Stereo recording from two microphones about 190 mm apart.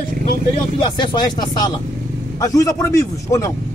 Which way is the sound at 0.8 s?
25° left (ahead or behind).